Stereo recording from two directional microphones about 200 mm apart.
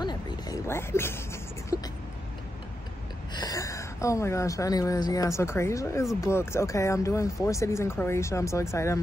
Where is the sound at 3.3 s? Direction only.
20° left (ahead or behind).